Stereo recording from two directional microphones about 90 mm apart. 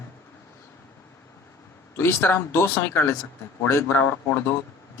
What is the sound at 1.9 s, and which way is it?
Speech, 30° left (ahead or behind).